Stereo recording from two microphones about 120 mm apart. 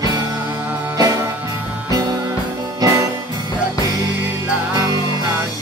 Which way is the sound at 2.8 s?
35° right (ahead or behind).